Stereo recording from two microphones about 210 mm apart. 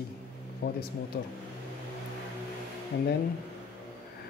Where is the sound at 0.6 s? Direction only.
55° left (ahead or behind).